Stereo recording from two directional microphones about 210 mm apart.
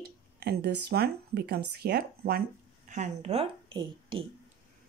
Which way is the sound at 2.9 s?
35° right (ahead or behind).